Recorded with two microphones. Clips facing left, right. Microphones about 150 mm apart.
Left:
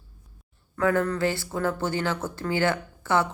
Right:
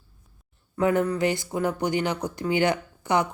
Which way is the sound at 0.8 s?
20° right (ahead or behind).